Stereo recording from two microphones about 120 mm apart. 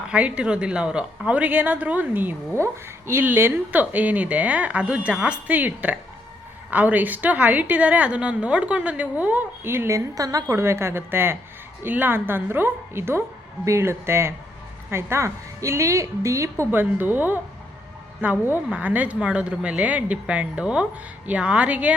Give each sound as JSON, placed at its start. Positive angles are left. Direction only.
{"t": 0.1, "sound": "a woman's voice", "side_deg": -10}